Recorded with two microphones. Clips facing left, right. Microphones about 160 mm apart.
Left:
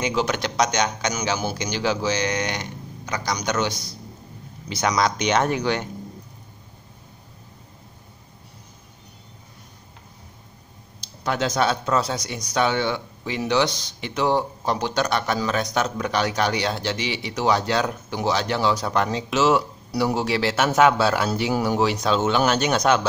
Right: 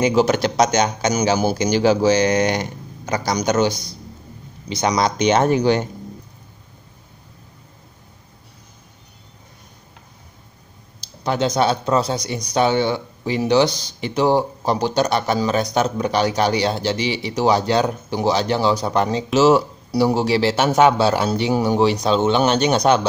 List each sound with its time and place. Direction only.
0.0 s speech: 40° right (ahead or behind)
3.6 s a man's voice: centre (ahead or behind)
4.8 s speech: 25° right (ahead or behind)
11.2 s speech: 25° right (ahead or behind)
13.7 s a man's voice: centre (ahead or behind)
14.0 s speech: 35° right (ahead or behind)